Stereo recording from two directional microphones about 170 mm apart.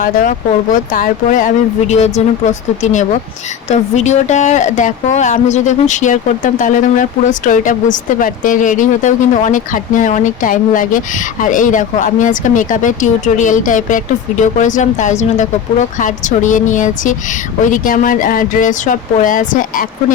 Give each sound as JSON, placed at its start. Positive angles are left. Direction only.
{"t": 0.0, "sound": "speech", "side_deg": 55}